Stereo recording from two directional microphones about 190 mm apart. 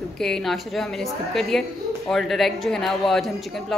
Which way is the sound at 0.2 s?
Centre (ahead or behind).